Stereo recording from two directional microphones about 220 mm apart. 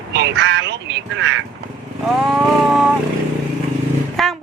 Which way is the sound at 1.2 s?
55° right (ahead or behind).